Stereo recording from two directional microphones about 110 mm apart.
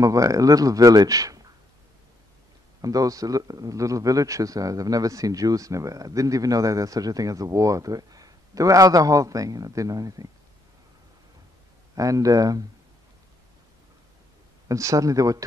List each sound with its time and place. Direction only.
0.0 s a man's voice: 30° right (ahead or behind)
2.8 s a man's voice: 35° right (ahead or behind)
11.9 s a man's voice: 30° right (ahead or behind)
14.7 s a man's voice: 30° right (ahead or behind)